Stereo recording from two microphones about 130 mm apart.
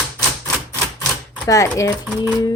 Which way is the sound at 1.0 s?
25° left (ahead or behind).